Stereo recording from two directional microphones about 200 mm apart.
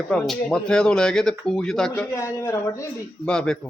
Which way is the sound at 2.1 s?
15° left (ahead or behind).